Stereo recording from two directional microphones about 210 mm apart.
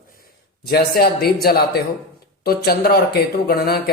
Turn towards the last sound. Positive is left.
turn(degrees=45)  # may be behind; listen again after turning